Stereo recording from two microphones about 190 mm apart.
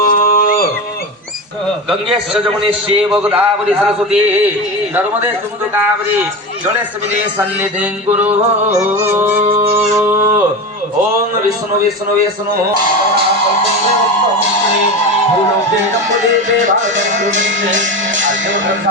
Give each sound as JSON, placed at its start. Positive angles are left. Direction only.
{"t": 0.0, "sound": "a sound", "side_deg": 50}
{"t": 3.1, "sound": "a man's voice", "side_deg": -5}
{"t": 3.8, "sound": "music", "side_deg": -5}
{"t": 7.3, "sound": "music", "side_deg": -10}
{"t": 8.1, "sound": "music", "side_deg": -35}
{"t": 8.7, "sound": "music", "side_deg": -10}
{"t": 9.6, "sound": "a sound", "side_deg": -15}
{"t": 17.0, "sound": "music", "side_deg": -40}
{"t": 17.7, "sound": "speech", "side_deg": -75}